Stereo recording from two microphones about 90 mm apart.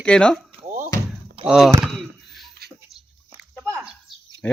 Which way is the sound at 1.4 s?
5° right (ahead or behind).